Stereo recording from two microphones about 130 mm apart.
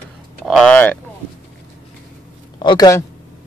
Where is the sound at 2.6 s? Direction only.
35° left (ahead or behind).